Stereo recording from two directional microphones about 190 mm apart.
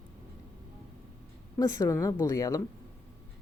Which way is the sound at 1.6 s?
15° left (ahead or behind).